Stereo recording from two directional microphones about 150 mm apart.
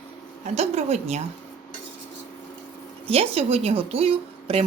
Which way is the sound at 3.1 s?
40° right (ahead or behind).